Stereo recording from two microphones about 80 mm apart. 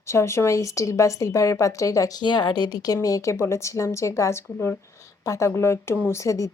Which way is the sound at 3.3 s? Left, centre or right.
Left.